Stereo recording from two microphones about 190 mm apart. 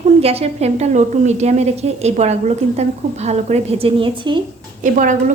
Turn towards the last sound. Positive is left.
turn(degrees=-40)  # may be behind; listen again after turning